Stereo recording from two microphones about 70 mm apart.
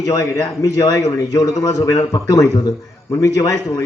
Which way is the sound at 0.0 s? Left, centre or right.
Left.